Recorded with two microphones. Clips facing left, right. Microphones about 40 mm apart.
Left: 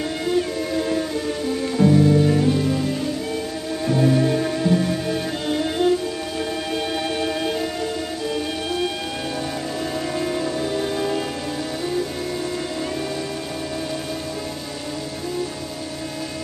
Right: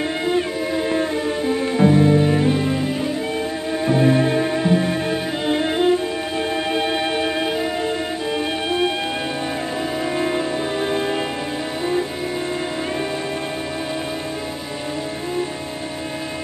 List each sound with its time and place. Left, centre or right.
0.3 s music: right
10.1 s music: right